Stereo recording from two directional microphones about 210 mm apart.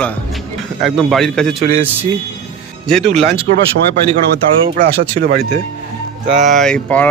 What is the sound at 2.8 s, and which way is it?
Speech, centre (ahead or behind).